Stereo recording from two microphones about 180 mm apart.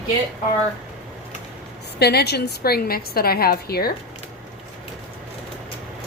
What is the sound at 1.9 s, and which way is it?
A woman's voice, 65° left (ahead or behind).